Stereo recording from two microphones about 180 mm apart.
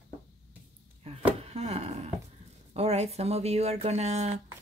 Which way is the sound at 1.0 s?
35° right (ahead or behind).